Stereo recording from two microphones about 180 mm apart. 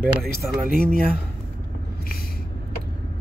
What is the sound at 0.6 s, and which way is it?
Speech, 55° right (ahead or behind).